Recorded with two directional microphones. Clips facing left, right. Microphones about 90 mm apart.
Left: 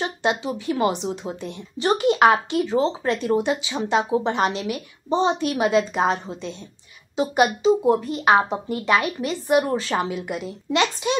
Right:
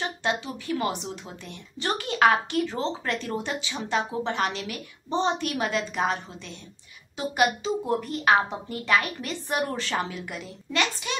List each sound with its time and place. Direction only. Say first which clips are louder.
0.0 s a woman's voice: left 5 dB; 20° left (ahead or behind)